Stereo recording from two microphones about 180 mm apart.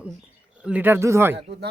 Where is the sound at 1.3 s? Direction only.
65° right (ahead or behind).